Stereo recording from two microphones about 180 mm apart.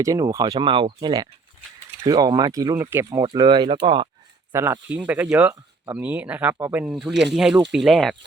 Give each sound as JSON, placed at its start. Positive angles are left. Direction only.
{"t": 0.0, "sound": "speech", "side_deg": -20}
{"t": 4.5, "sound": "speech", "side_deg": -15}
{"t": 7.1, "sound": "speech", "side_deg": -75}
{"t": 7.3, "sound": "speech", "side_deg": 0}